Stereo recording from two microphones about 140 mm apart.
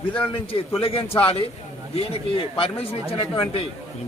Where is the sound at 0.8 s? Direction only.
40° left (ahead or behind).